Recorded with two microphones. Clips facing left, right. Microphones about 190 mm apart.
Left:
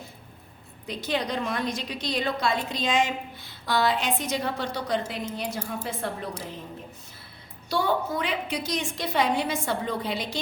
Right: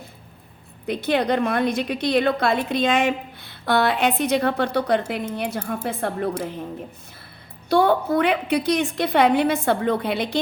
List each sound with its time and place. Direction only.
0.9 s a woman's voice: 60° right (ahead or behind)
7.7 s a woman's voice: 60° right (ahead or behind)